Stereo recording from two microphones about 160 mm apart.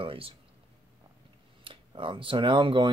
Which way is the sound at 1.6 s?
30° right (ahead or behind).